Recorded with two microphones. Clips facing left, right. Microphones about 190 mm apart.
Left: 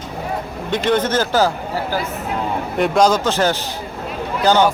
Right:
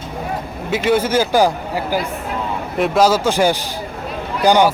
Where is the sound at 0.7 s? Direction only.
10° right (ahead or behind).